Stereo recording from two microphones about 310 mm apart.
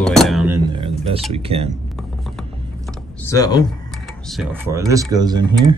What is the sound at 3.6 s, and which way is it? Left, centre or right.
Speech, centre.